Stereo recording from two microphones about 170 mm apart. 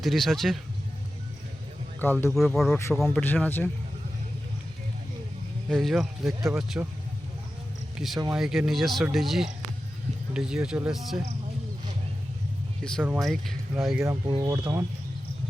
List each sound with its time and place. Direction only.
0.0 s speech: centre (ahead or behind)
2.3 s speech: centre (ahead or behind)
3.2 s a man's voice: 10° left (ahead or behind)
5.6 s speech: centre (ahead or behind)
7.9 s speech: centre (ahead or behind)
13.0 s speech: 5° right (ahead or behind)
14.0 s speech: 20° right (ahead or behind)